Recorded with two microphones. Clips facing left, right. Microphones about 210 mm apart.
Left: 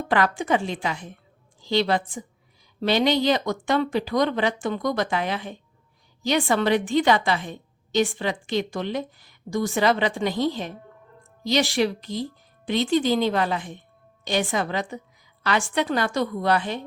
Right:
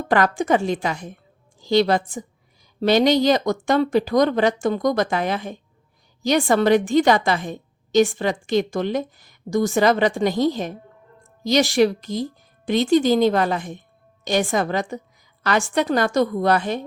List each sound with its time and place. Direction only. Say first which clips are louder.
0.1 s a woman's voice: right 4 dB; 45° right (ahead or behind)